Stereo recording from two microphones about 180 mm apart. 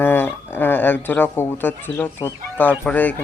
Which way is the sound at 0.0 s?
10° left (ahead or behind).